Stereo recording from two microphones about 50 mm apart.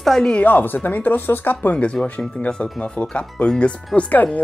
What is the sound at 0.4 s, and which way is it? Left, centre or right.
Speech, left.